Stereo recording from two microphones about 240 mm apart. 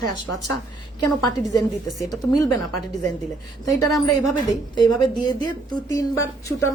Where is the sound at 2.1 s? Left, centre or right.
Centre.